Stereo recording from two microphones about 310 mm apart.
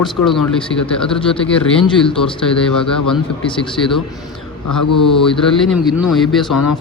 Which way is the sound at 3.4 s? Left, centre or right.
Centre.